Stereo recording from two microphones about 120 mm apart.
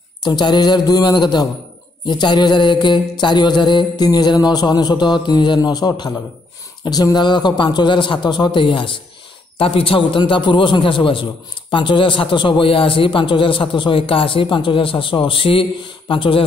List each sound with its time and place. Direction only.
0.2 s a man's voice: 35° left (ahead or behind)